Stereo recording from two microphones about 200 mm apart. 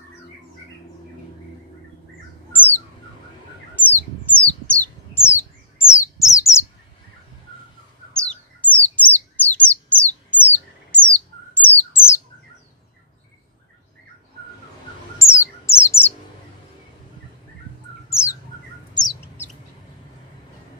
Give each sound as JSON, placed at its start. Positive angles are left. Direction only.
{"t": 2.5, "sound": "bird", "side_deg": 10}
{"t": 3.7, "sound": "squawk", "side_deg": 10}
{"t": 8.1, "sound": "bird", "side_deg": 5}
{"t": 15.1, "sound": "bird", "side_deg": 15}
{"t": 18.9, "sound": "chirp", "side_deg": 20}